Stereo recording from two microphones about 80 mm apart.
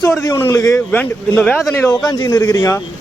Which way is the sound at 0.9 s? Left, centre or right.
Left.